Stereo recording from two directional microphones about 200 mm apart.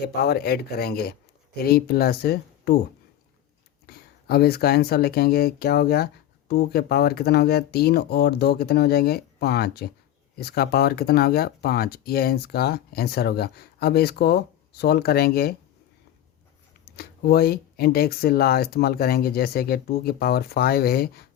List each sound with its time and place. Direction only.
0.0 s speech: 50° left (ahead or behind)
3.8 s speech: 50° left (ahead or behind)
16.8 s speech: 50° left (ahead or behind)